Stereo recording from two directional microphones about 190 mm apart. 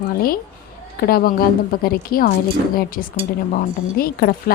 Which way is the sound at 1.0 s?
50° left (ahead or behind).